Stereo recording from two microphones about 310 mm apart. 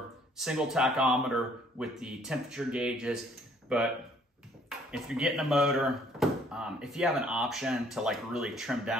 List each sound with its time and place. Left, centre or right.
0.4 s speech: centre